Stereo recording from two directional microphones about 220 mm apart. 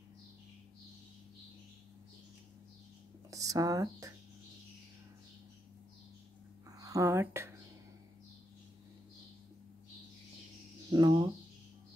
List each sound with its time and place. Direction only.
3.3 s speech: 15° right (ahead or behind)
6.8 s speech: 15° right (ahead or behind)
10.9 s speech: 15° right (ahead or behind)